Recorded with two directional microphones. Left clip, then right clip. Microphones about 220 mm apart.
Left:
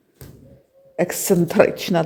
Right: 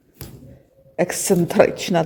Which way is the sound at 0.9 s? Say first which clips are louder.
Even; centre (ahead or behind).